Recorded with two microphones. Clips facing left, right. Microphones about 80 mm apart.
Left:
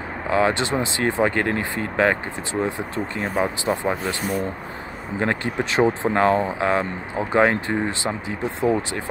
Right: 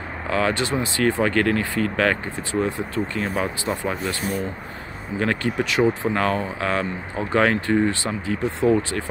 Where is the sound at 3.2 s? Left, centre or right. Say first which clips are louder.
Left 1 dB; left.